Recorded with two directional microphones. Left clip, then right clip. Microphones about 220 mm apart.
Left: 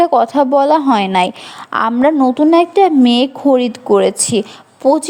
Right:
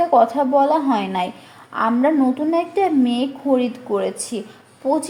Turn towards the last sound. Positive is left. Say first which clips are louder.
# left 8 dB
turn(degrees=35)  # may be behind; listen again after turning